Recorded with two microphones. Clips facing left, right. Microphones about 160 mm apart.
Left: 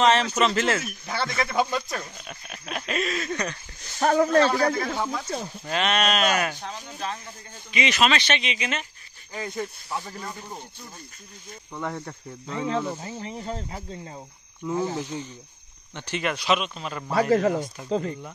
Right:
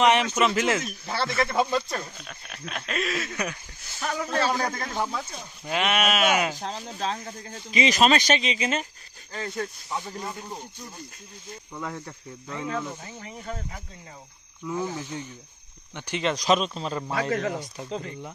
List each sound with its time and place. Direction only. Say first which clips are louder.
0.0 s speech: even; 15° right (ahead or behind)
1.0 s speech: right 3 dB; centre (ahead or behind)
4.0 s a man's voice: left 10 dB; 45° left (ahead or behind)
4.5 s speech: left 4 dB; 10° right (ahead or behind)
6.5 s speech: right 3 dB; 35° right (ahead or behind)
9.3 s speech: even; 15° left (ahead or behind)
9.8 s speech: even; centre (ahead or behind)
11.8 s speech: left 4 dB; 35° left (ahead or behind)
14.7 s speech: left 3 dB; 20° left (ahead or behind)
15.9 s speech: right 1 dB; 15° right (ahead or behind)
16.3 s speech: right 3 dB; 35° right (ahead or behind)
17.1 s speech: left 8 dB; 35° left (ahead or behind)